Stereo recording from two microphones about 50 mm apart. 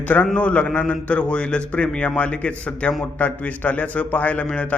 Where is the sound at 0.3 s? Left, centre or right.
Left.